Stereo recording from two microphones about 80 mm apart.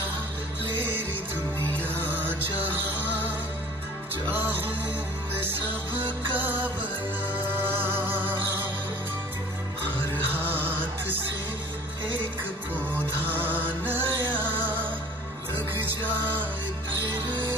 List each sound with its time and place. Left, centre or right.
1.8 s music: right
6.3 s music: right
9.8 s music: right
13.3 s music: right